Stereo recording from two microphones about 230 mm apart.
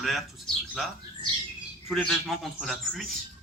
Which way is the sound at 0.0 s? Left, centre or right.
Centre.